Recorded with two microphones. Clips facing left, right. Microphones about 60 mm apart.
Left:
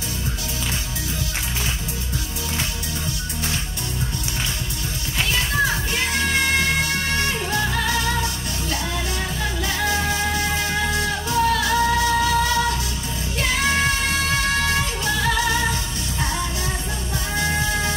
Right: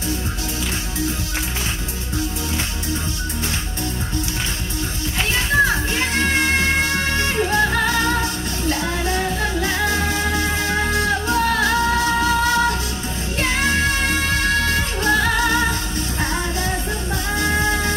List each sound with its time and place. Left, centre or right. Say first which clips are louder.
5.9 s music: even; right
17.4 s music: right 2 dB; right